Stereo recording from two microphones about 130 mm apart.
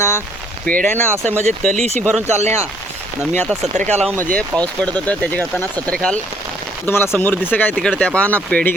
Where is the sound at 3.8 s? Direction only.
60° right (ahead or behind).